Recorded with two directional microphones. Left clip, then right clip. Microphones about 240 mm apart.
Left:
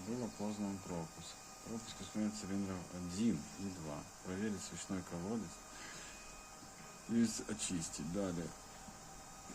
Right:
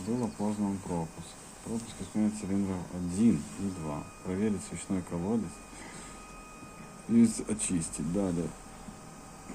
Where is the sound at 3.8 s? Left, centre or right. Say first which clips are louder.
Right 9 dB; centre.